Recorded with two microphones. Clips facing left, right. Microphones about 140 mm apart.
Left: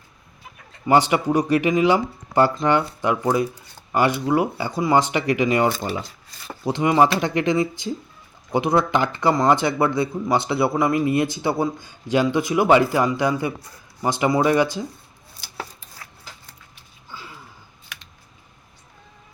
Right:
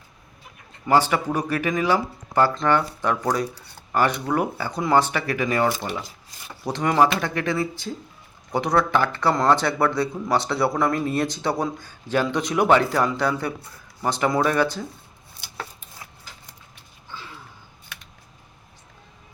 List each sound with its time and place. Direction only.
0.9 s speech: 15° left (ahead or behind)
17.1 s gasp: 5° left (ahead or behind)